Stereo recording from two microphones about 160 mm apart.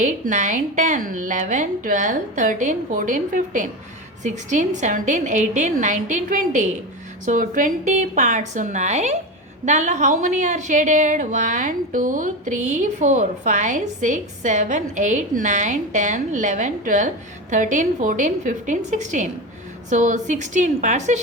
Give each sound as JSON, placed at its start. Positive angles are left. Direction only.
{"t": 0.0, "sound": "a woman's voice", "side_deg": -50}